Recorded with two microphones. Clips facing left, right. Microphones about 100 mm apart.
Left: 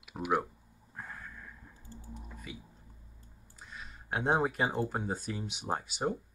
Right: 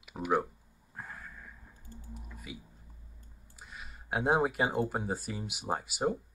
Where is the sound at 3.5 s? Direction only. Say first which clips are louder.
Even; 5° right (ahead or behind).